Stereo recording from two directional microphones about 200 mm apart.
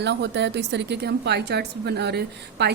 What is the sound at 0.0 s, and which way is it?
A woman's voice, 60° right (ahead or behind).